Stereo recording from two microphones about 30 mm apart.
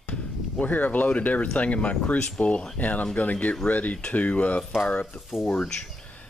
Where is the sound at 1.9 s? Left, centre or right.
Left.